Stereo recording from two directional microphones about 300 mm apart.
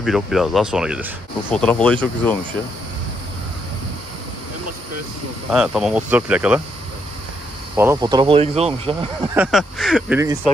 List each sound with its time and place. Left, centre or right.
0.0 s speech: centre
5.5 s speech: centre
7.7 s speech: centre
9.3 s speech: centre